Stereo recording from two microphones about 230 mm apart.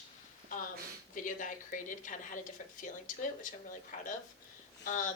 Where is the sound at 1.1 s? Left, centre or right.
Left.